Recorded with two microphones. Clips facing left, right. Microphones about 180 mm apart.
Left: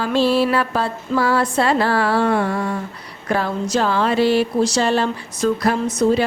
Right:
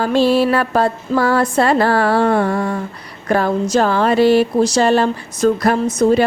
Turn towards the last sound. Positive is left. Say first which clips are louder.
# right 3 dB
turn(degrees=-50)  # may be behind; listen again after turning